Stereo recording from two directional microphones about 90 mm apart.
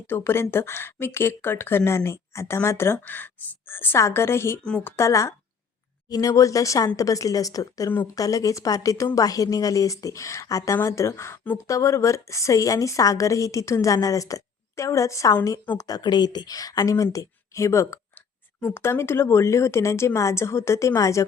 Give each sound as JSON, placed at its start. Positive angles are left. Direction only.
{"t": 0.1, "sound": "a woman's voice", "side_deg": 25}
{"t": 15.8, "sound": "a woman's voice", "side_deg": 45}